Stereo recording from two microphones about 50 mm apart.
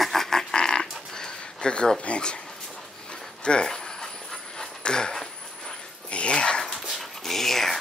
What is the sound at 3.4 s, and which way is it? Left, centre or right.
Pant, centre.